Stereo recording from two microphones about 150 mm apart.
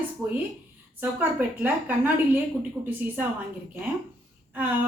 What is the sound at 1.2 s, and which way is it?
Speech, 10° right (ahead or behind).